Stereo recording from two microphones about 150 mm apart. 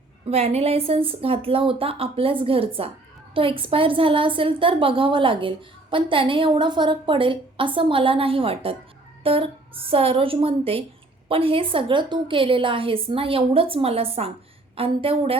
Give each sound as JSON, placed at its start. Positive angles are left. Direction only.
{"t": 0.3, "sound": "a woman's voice", "side_deg": -45}